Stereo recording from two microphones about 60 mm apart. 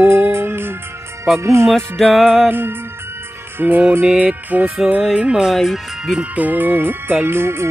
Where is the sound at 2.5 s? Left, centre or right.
Right.